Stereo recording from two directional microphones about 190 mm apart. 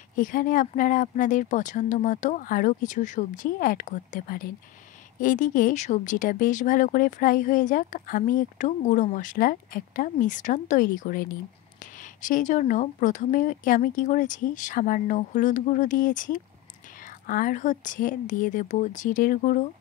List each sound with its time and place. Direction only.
0.1 s speech: 45° left (ahead or behind)